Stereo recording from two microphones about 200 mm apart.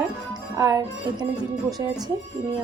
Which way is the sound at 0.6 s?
20° right (ahead or behind).